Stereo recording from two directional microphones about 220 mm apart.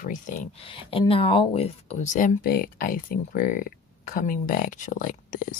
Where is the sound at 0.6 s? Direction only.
25° left (ahead or behind).